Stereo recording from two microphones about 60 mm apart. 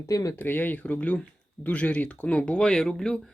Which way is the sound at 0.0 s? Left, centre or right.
Left.